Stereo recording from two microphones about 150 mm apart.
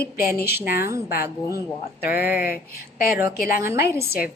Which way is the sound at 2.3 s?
80° left.